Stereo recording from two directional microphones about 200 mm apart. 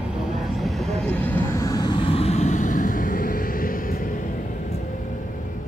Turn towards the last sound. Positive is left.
turn(degrees=45)  # may be behind; listen again after turning